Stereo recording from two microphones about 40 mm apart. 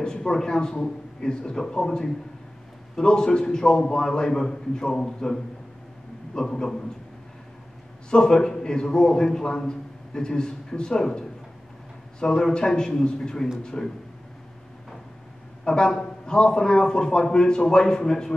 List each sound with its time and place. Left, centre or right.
0.0 s a man's voice: centre
8.1 s a man's voice: centre
15.6 s a man's voice: centre